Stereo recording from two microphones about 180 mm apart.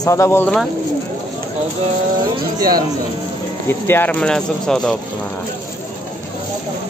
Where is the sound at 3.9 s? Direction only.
10° left (ahead or behind).